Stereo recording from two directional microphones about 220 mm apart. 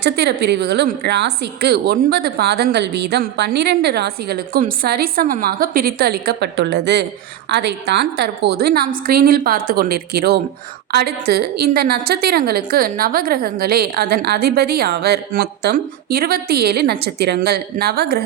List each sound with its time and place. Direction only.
0.0 s a woman's voice: 50° right (ahead or behind)